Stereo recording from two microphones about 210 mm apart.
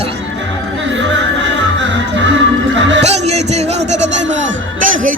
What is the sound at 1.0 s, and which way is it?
Music, 60° right (ahead or behind).